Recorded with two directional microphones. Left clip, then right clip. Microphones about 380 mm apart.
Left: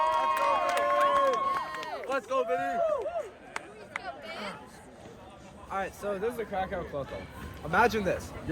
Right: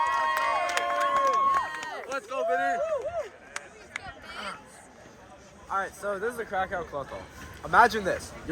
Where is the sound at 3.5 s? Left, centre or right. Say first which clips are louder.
Even; centre.